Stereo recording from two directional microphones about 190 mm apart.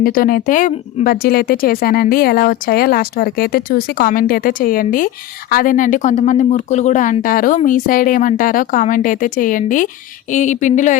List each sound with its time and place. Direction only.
0.0 s speech: 50° left (ahead or behind)